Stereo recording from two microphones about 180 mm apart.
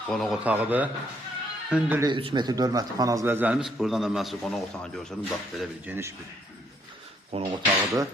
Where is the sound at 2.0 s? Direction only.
25° right (ahead or behind); by 5.9 s centre (ahead or behind).